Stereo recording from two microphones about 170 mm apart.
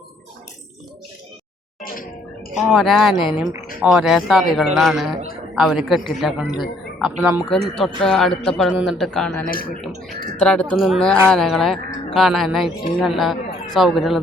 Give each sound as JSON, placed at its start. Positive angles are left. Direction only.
{"t": 1.8, "sound": "music", "side_deg": 55}
{"t": 2.6, "sound": "a man's voice", "side_deg": 0}
{"t": 7.5, "sound": "speech", "side_deg": 0}
{"t": 9.5, "sound": "speech", "side_deg": 60}
{"t": 10.4, "sound": "a man's voice", "side_deg": 5}